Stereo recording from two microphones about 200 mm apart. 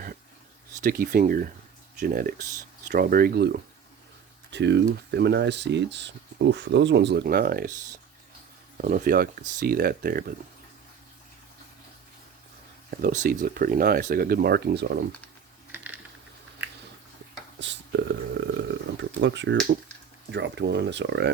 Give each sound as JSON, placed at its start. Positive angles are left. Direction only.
{"t": 0.8, "sound": "speech", "side_deg": -45}
{"t": 8.8, "sound": "speech", "side_deg": -45}
{"t": 12.9, "sound": "speech", "side_deg": -45}
{"t": 15.7, "sound": "typing", "side_deg": -10}
{"t": 17.6, "sound": "a sound", "side_deg": -60}
{"t": 20.3, "sound": "speech", "side_deg": -60}